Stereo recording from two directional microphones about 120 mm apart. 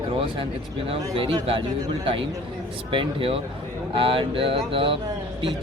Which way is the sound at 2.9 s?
45° right (ahead or behind).